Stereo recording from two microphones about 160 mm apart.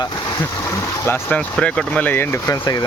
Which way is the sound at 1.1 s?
10° left (ahead or behind).